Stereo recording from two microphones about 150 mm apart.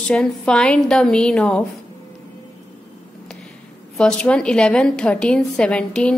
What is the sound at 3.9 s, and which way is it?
A woman's voice, 5° left (ahead or behind).